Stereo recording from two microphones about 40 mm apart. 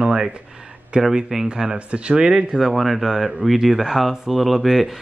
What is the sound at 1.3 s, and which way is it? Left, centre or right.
Speech, centre.